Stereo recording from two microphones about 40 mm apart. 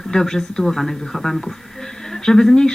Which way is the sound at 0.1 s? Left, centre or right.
Centre.